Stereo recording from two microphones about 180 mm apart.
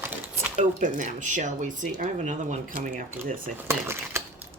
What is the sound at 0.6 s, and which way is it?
Speech, 45° right (ahead or behind).